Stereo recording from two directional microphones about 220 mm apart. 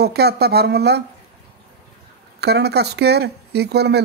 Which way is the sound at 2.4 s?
50° right (ahead or behind).